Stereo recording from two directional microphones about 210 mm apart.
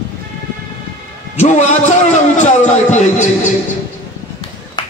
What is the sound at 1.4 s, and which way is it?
A man's voice, 35° left (ahead or behind).